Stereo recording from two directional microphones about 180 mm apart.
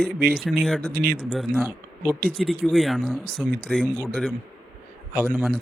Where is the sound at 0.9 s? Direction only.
55° right (ahead or behind).